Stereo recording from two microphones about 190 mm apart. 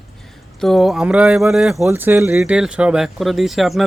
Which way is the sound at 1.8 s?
10° right (ahead or behind).